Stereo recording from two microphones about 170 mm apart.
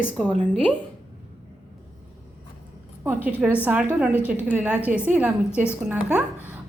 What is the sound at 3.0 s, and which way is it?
A woman's voice, 10° right (ahead or behind).